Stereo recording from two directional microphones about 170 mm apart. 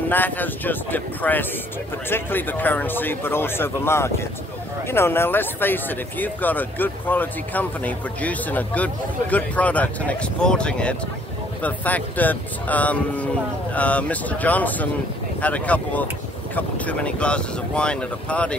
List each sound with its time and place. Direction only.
0.1 s speech: 10° left (ahead or behind)